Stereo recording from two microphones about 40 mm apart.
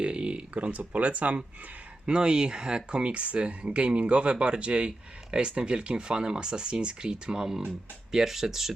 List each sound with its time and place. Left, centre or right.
0.0 s speech: right
2.0 s speech: right